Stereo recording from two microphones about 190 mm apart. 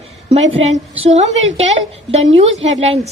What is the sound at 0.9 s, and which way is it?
A woman's voice, 35° right (ahead or behind).